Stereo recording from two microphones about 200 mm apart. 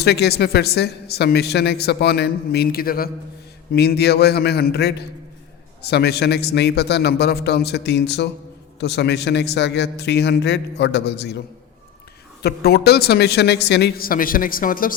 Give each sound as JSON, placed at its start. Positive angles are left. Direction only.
{"t": 0.0, "sound": "a woman's voice", "side_deg": 55}